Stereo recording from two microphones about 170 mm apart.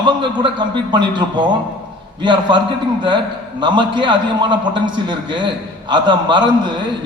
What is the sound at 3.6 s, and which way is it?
A man's voice, 25° right (ahead or behind).